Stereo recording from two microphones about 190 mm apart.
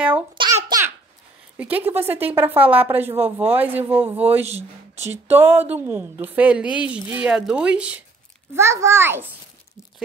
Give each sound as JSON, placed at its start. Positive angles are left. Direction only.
{"t": 0.4, "sound": "babbling", "side_deg": -20}
{"t": 1.6, "sound": "a woman's voice", "side_deg": -10}
{"t": 4.5, "sound": "speech", "side_deg": -35}
{"t": 5.3, "sound": "a woman's voice", "side_deg": -10}